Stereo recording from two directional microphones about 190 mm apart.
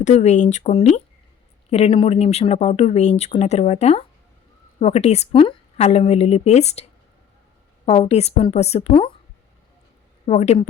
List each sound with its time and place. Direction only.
0.0 s speech: 40° left (ahead or behind)
7.9 s speech: 35° left (ahead or behind)
10.2 s speech: 35° left (ahead or behind)